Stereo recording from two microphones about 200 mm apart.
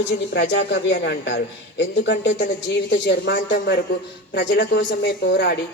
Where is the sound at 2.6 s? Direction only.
60° left (ahead or behind).